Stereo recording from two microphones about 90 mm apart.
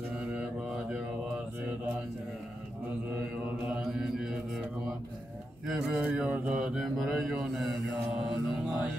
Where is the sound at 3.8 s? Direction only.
5° right (ahead or behind).